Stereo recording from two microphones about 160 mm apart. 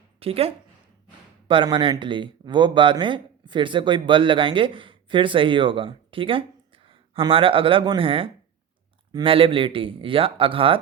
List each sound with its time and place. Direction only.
0.2 s speech: 35° right (ahead or behind)